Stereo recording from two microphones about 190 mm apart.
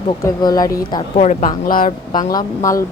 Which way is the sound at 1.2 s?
40° left (ahead or behind).